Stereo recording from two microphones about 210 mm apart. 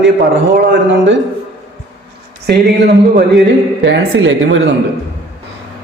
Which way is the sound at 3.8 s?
60° right (ahead or behind).